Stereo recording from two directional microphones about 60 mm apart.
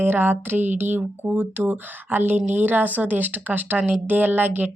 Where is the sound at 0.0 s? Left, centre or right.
Right.